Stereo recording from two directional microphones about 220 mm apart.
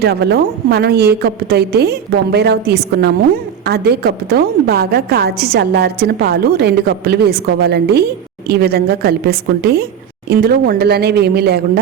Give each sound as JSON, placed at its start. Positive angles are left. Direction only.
{"t": 0.0, "sound": "a woman's voice", "side_deg": -45}